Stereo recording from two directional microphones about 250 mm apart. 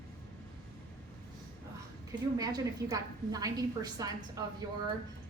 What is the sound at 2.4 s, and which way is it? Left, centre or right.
A woman's voice, centre.